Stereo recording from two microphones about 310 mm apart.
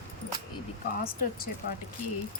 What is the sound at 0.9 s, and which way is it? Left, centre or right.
Speech, left.